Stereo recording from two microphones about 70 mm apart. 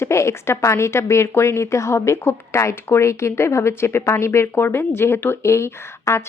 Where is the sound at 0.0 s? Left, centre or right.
Left.